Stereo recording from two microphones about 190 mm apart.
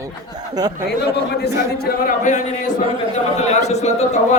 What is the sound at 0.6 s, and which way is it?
Speech, 20° right (ahead or behind).